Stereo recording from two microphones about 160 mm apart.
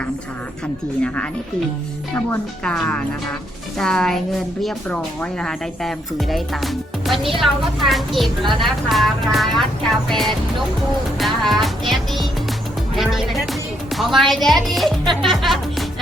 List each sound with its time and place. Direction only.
1.0 s a woman's voice: 5° left (ahead or behind)
11.2 s music: centre (ahead or behind)
13.0 s speech: centre (ahead or behind)